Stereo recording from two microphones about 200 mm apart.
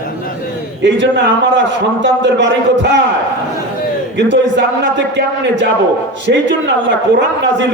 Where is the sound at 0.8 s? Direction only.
60° right (ahead or behind).